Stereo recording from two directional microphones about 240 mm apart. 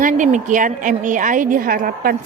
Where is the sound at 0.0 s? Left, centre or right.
Right.